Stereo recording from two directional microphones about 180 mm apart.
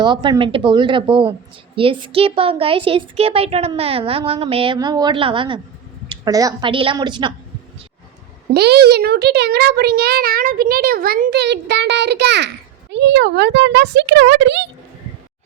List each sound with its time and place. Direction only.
0.0 s a woman's voice: 25° right (ahead or behind)
8.5 s a child's voice: 65° right (ahead or behind)